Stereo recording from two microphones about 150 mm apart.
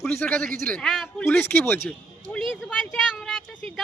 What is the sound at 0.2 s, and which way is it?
A man's voice, 10° left (ahead or behind).